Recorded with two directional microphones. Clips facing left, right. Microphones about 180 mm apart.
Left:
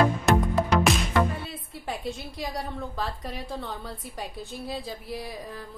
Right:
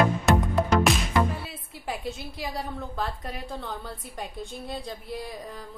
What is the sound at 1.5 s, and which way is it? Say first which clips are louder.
A woman's voice: even; centre (ahead or behind).